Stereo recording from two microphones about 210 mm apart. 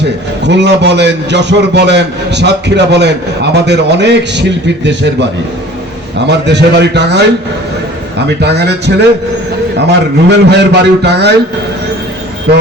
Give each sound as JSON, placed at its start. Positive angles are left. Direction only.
{"t": 0.0, "sound": "a man's voice", "side_deg": -55}
{"t": 6.2, "sound": "a man's voice", "side_deg": -55}
{"t": 8.4, "sound": "a man's voice", "side_deg": -50}
{"t": 10.2, "sound": "a man's voice", "side_deg": -55}